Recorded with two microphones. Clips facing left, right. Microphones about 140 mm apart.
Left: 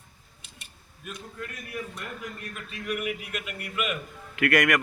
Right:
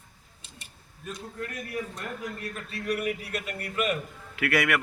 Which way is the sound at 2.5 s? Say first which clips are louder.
Right 1 dB; 35° right (ahead or behind).